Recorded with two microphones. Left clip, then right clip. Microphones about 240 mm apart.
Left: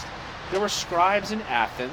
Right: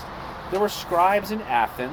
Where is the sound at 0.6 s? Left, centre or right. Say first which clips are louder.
Right 2 dB; right.